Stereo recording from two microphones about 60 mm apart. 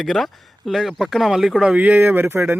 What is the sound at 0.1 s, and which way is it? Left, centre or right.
Speech, centre.